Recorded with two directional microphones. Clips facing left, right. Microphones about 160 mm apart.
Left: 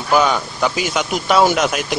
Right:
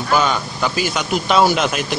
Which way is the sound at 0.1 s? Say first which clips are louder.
Left 3 dB; 10° left (ahead or behind).